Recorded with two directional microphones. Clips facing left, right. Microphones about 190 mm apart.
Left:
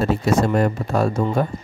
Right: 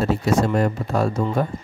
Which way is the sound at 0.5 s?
55° left (ahead or behind).